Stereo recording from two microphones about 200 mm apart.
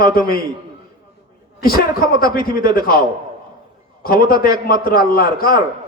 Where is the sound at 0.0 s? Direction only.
45° left (ahead or behind).